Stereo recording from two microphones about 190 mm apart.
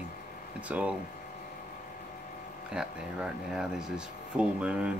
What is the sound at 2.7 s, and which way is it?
Speech, 5° right (ahead or behind).